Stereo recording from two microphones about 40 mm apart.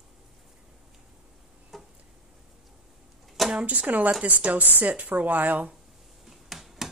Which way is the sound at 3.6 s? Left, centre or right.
Right.